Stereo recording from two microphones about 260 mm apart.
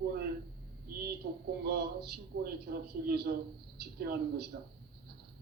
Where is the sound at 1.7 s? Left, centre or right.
Right.